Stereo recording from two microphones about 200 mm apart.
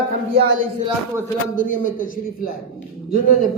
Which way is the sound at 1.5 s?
40° left (ahead or behind).